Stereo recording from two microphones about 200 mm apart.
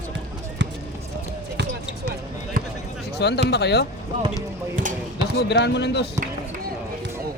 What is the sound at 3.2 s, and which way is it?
Speech, 60° left (ahead or behind).